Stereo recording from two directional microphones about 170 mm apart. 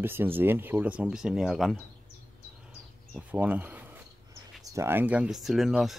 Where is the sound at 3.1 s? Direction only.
10° right (ahead or behind).